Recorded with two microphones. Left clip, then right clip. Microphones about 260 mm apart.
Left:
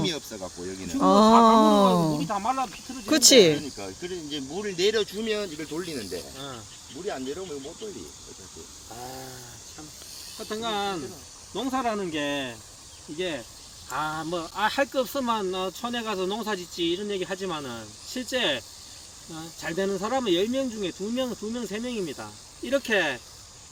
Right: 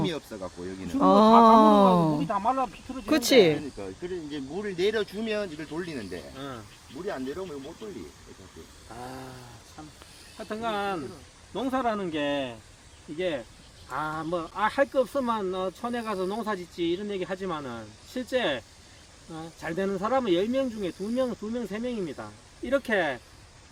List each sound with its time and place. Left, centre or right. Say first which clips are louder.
0.0 s speech: left 1 dB; centre
3.1 s speech: left 3 dB; centre
5.4 s speech: left 1 dB; right
9.0 s speech: left 1 dB; right
10.3 s speech: left 1 dB; centre